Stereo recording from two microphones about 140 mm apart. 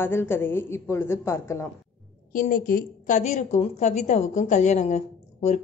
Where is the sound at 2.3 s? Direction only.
90° left.